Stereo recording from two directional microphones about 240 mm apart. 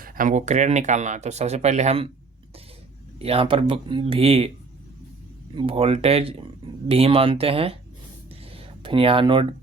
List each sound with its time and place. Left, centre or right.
0.0 s speech: right
3.2 s speech: right
5.5 s speech: right